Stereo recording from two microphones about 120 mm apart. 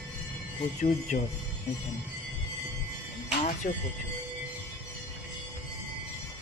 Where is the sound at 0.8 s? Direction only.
70° left (ahead or behind).